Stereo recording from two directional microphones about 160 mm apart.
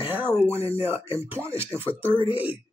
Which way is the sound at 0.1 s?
15° right (ahead or behind).